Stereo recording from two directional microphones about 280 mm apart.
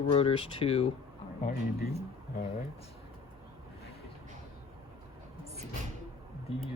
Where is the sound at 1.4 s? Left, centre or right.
Left.